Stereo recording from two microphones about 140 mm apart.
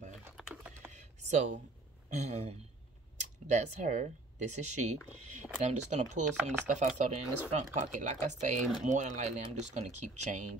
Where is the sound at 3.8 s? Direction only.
60° right (ahead or behind).